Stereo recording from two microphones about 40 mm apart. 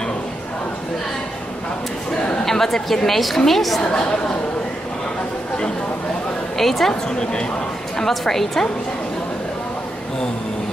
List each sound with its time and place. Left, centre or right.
2.4 s a woman's voice: centre
3.8 s a woman's voice: left
6.6 s a woman's voice: centre
6.9 s a woman's voice: centre
8.0 s a woman's voice: centre